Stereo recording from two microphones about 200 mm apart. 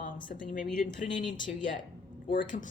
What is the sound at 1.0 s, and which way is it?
Speech, 25° left (ahead or behind).